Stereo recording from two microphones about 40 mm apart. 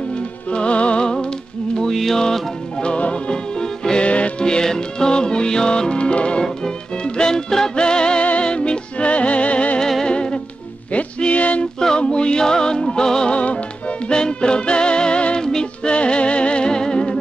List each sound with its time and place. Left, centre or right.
0.5 s music: left
1.9 s music: centre
4.0 s music: left
7.2 s music: centre; by 9.8 s left
9.8 s music: centre
10.0 s music: left
13.3 s music: left; by 15.9 s centre
15.9 s music: left